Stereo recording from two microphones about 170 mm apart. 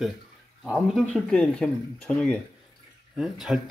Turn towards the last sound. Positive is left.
turn(degrees=0)  # may be behind; listen again after turning